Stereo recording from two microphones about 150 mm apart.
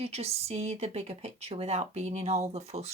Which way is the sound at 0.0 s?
45° right (ahead or behind).